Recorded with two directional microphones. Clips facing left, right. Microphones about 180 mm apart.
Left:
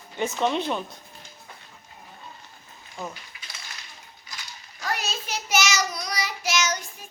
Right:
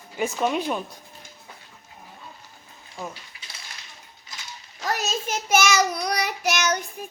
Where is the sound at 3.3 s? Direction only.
35° right (ahead or behind).